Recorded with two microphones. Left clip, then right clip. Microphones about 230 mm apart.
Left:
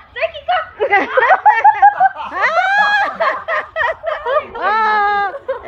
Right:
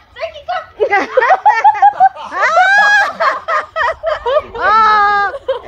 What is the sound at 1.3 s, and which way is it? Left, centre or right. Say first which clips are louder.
Snicker: even; right.